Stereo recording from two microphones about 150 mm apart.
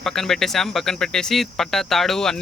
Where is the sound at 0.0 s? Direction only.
5° left (ahead or behind).